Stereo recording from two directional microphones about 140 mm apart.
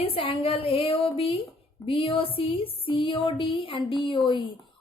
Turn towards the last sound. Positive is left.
turn(degrees=35)  # may be behind; listen again after turning